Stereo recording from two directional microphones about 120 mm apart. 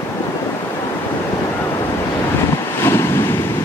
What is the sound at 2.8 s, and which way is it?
Waves, 20° left (ahead or behind).